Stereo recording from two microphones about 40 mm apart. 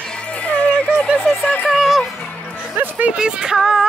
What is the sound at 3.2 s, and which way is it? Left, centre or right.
Child singing, centre.